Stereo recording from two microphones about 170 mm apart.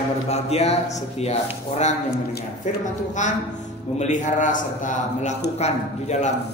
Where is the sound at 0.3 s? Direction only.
40° left (ahead or behind).